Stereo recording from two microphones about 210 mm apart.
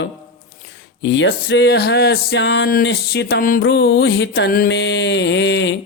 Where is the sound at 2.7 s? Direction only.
45° left (ahead or behind).